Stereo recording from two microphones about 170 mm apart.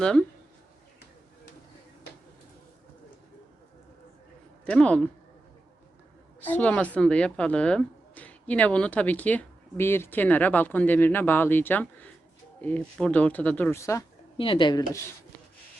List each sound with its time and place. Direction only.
0.0 s speech: 5° left (ahead or behind)
4.6 s speech: 5° left (ahead or behind)
6.4 s speech: 10° left (ahead or behind)
14.3 s speech: 30° left (ahead or behind)